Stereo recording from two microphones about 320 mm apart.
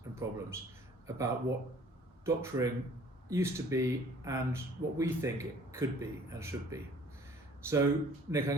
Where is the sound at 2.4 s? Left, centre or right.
Centre.